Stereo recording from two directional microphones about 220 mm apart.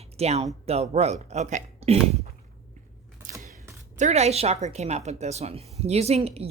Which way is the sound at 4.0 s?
30° right (ahead or behind).